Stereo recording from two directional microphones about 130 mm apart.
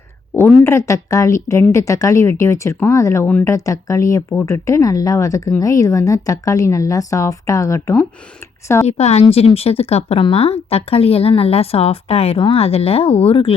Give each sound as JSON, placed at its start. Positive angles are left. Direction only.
{"t": 0.3, "sound": "speech", "side_deg": 15}
{"t": 8.9, "sound": "a woman's voice", "side_deg": 55}
{"t": 9.2, "sound": "speech", "side_deg": 45}